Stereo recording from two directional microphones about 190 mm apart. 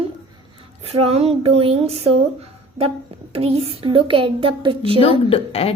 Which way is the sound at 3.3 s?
30° right (ahead or behind).